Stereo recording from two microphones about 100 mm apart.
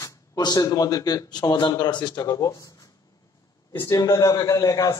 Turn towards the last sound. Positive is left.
turn(degrees=35)  # may be behind; listen again after turning